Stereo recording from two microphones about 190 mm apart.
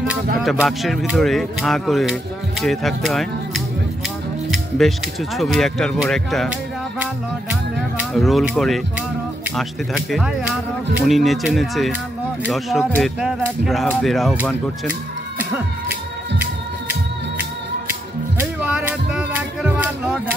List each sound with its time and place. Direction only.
0.4 s speech: centre (ahead or behind)
4.5 s music: centre (ahead or behind)
5.4 s speech: centre (ahead or behind)
8.0 s speech: centre (ahead or behind)
14.9 s music: 10° right (ahead or behind)
18.4 s music: 5° right (ahead or behind)